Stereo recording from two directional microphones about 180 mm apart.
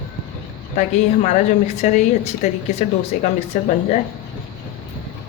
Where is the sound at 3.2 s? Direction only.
40° left (ahead or behind).